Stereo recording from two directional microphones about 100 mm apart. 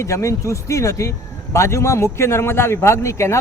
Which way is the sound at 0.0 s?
30° left (ahead or behind).